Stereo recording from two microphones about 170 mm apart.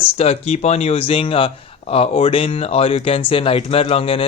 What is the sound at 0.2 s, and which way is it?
Speech, 35° left (ahead or behind).